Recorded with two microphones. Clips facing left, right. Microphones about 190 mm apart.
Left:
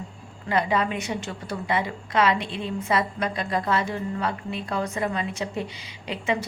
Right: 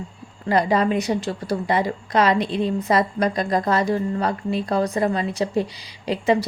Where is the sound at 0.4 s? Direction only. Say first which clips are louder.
Right 5 dB; 40° right (ahead or behind).